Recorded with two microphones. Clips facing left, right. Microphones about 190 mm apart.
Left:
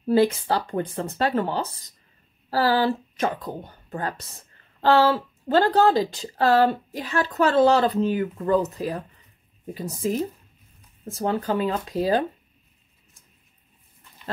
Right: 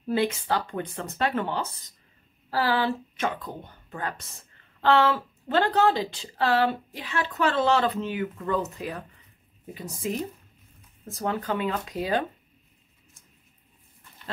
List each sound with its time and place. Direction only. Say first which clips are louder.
0.0 s speech: left 6 dB; 35° left (ahead or behind)
10.0 s speech: left 5 dB; 35° left (ahead or behind)